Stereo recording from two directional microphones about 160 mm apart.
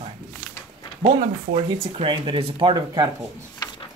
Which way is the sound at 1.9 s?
35° right (ahead or behind).